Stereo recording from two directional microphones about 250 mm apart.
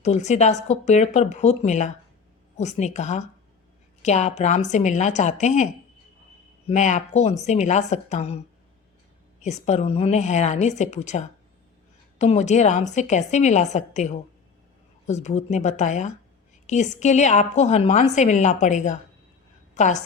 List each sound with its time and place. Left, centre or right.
0.0 s a woman's voice: left
6.7 s a woman's voice: left
9.4 s a woman's voice: left